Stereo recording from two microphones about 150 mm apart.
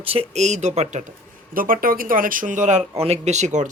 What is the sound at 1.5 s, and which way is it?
Speech, 70° right (ahead or behind).